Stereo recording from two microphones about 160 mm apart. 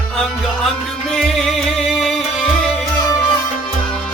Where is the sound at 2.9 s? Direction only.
25° left (ahead or behind).